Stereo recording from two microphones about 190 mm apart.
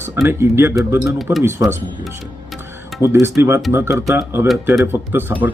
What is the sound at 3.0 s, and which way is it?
Speech, 15° right (ahead or behind).